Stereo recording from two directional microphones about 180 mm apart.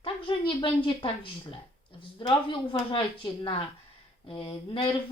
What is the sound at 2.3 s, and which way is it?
Speech, 25° left (ahead or behind).